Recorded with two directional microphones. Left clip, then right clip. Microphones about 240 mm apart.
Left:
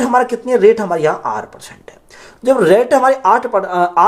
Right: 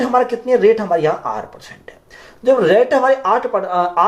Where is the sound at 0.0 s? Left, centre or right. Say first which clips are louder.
Left 2 dB; left.